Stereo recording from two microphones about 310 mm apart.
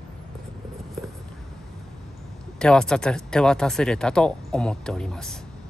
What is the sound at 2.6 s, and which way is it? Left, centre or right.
Speech, centre.